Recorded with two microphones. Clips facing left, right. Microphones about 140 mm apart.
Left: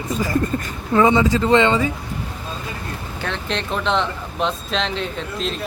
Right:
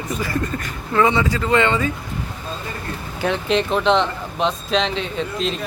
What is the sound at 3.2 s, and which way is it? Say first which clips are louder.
Speech: right 7 dB; 10° right (ahead or behind).